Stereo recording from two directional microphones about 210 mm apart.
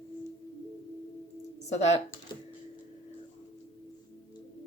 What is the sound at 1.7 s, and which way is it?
Speech, 30° left (ahead or behind).